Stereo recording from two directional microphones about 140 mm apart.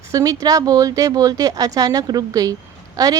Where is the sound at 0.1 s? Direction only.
25° right (ahead or behind).